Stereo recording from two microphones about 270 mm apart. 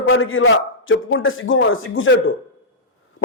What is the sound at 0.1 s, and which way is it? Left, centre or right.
A man's voice, left.